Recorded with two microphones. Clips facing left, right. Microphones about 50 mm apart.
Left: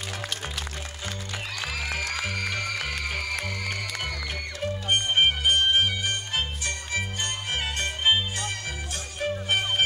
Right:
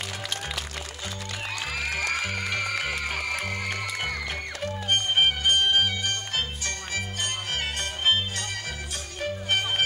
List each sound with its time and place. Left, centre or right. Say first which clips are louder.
2.2 s music: right 1 dB; centre
3.1 s music: right 1 dB; right
4.8 s music: even; centre
9.2 s music: left 1 dB; centre